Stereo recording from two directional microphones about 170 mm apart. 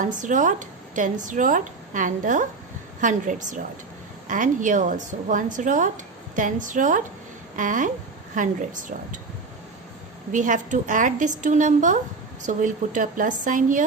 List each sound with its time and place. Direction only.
0.0 s speech: 50° right (ahead or behind)
10.3 s speech: 50° right (ahead or behind)